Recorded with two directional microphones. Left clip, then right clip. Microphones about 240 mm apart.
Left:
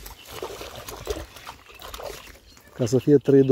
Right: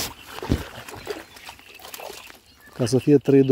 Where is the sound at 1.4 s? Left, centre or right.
Right.